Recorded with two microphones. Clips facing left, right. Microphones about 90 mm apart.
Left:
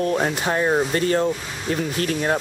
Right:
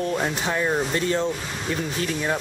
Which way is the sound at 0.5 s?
25° left (ahead or behind).